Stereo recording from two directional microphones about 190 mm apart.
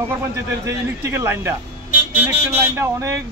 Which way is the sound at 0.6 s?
15° right (ahead or behind).